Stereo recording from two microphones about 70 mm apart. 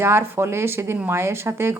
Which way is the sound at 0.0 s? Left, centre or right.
Right.